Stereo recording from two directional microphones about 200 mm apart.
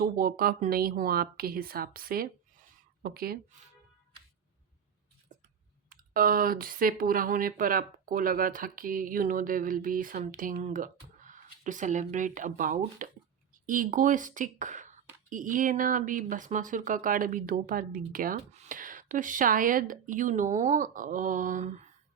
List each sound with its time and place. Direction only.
0.0 s speech: 45° right (ahead or behind)
5.9 s speech: 45° right (ahead or behind)